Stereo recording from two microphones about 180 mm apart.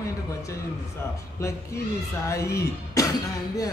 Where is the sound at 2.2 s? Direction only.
15° left (ahead or behind).